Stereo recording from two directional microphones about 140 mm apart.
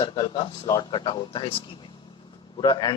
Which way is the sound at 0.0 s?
35° left (ahead or behind).